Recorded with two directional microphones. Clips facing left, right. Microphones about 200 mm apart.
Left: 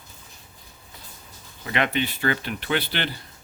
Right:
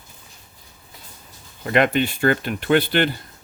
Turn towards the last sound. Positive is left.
turn(degrees=-50)  # may be behind; listen again after turning